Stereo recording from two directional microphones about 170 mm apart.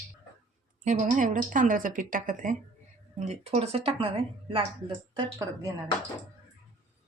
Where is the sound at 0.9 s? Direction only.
50° right (ahead or behind).